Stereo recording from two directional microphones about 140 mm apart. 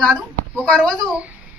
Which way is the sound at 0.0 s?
5° left (ahead or behind).